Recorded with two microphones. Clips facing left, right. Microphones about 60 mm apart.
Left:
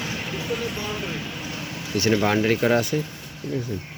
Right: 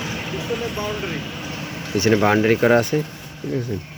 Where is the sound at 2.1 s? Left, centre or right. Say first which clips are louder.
Right 4 dB; right.